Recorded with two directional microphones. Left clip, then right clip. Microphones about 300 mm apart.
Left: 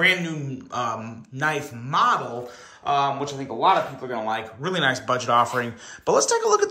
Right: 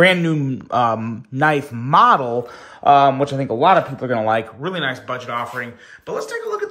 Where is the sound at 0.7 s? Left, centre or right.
Centre.